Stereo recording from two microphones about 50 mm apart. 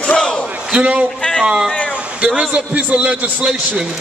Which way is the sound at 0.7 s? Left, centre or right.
Right.